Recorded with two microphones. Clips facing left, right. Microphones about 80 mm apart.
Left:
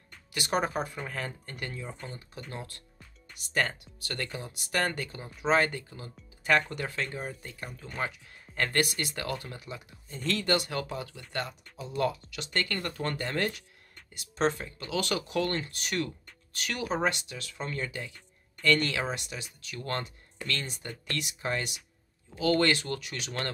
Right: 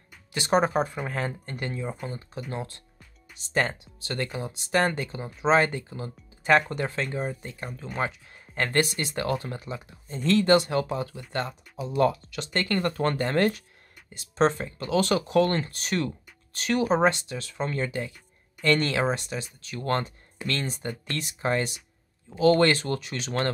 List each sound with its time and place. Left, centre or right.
0.3 s speech: right
11.7 s a sound: centre
12.0 s speech: right